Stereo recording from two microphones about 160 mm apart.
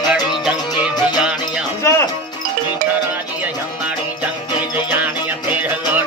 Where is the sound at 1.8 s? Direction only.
15° left (ahead or behind).